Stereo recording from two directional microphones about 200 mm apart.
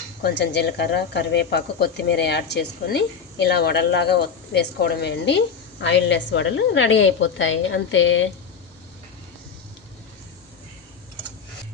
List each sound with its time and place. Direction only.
0.2 s a woman's voice: 55° left (ahead or behind); by 8.3 s 70° left (ahead or behind)